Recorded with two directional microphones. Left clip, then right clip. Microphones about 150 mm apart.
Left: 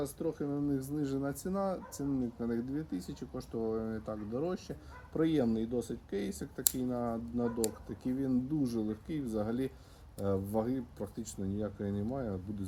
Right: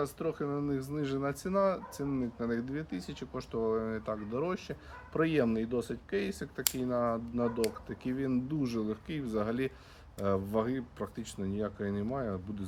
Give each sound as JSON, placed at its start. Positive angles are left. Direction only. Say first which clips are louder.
{"t": 0.0, "sound": "speech", "louder": "right 2 dB", "side_deg": -20}